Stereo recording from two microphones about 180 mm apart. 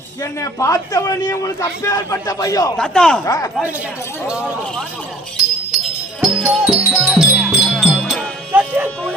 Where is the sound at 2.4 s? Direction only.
20° left (ahead or behind).